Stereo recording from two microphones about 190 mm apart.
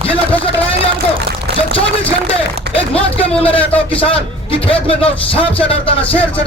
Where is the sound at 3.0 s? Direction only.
10° left (ahead or behind).